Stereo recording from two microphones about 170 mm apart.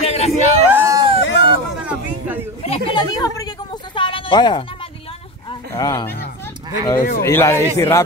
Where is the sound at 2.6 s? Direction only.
35° left (ahead or behind).